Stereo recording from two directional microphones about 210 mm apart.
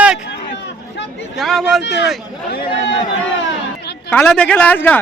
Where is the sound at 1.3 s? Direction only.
Centre (ahead or behind).